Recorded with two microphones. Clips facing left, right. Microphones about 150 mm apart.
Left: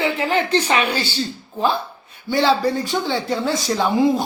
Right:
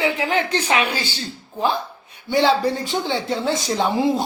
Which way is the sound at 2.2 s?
20° right (ahead or behind).